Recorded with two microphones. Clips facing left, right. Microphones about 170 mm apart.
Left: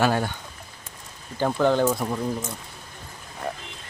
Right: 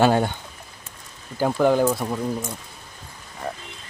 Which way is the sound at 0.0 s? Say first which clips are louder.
Right 4 dB; 25° right (ahead or behind).